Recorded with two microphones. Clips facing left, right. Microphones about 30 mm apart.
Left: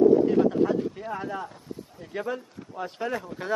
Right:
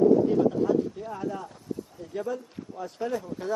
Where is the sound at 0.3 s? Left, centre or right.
Left.